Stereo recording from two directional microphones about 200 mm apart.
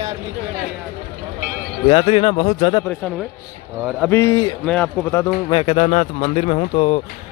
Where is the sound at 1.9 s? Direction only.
30° left (ahead or behind).